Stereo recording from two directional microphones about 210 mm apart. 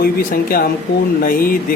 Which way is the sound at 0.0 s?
45° left (ahead or behind).